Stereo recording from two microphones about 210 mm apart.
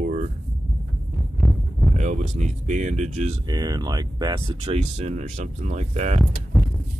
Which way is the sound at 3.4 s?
20° right (ahead or behind).